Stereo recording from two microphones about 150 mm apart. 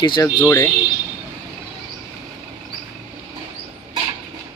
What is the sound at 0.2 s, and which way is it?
Speech, 20° left (ahead or behind).